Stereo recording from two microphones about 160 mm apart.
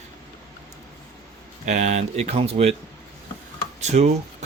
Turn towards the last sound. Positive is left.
turn(degrees=-45)  # may be behind; listen again after turning